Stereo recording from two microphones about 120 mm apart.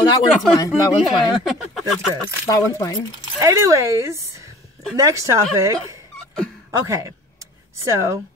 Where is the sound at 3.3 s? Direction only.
25° right (ahead or behind).